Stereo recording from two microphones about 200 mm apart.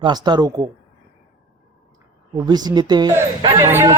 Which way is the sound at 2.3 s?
20° right (ahead or behind).